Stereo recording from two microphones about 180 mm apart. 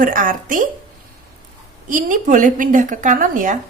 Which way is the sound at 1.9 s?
45° right (ahead or behind).